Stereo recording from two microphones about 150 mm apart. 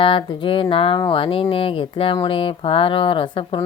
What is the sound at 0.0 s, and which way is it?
Speech, 35° left (ahead or behind).